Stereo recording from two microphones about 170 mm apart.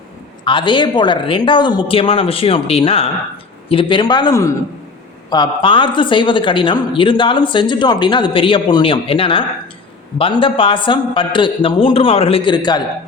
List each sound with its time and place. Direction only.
0.4 s speech: 30° left (ahead or behind)